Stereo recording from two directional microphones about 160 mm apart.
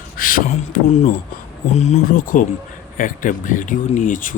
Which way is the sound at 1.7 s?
45° left (ahead or behind).